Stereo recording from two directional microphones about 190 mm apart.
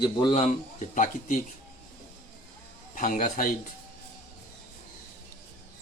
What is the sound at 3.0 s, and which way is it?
Speech, 45° left (ahead or behind).